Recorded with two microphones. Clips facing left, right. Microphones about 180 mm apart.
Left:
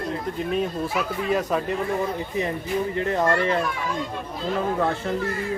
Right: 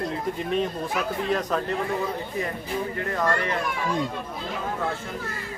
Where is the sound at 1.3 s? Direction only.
5° left (ahead or behind).